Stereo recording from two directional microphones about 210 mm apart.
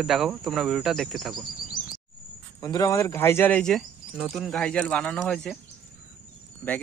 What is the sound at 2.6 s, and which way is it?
Speech, 15° left (ahead or behind).